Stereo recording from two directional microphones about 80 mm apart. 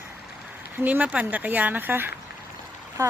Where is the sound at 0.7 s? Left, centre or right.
Right.